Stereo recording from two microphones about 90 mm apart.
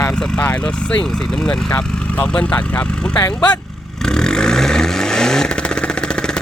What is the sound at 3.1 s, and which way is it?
Speech, 45° left (ahead or behind).